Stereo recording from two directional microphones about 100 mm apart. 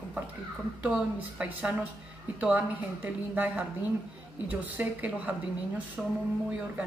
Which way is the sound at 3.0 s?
15° right (ahead or behind).